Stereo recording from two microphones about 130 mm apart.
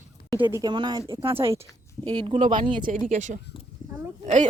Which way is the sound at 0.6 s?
35° right (ahead or behind).